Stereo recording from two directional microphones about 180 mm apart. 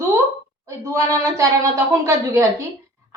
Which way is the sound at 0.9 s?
15° right (ahead or behind).